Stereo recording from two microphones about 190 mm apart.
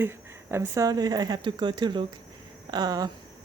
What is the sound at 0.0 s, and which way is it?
Speech, 10° right (ahead or behind).